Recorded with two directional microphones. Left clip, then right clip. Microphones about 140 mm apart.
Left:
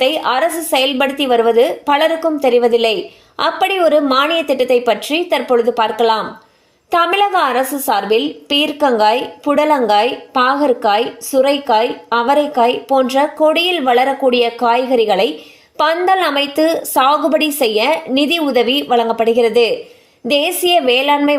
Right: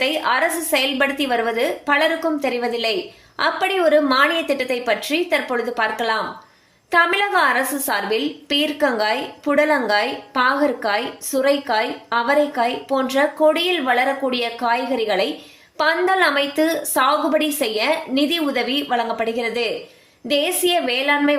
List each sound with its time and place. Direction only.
0.0 s a woman's voice: 35° left (ahead or behind)